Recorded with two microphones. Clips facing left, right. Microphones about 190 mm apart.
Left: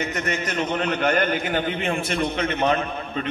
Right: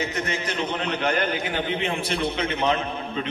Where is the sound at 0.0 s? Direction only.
60° left (ahead or behind).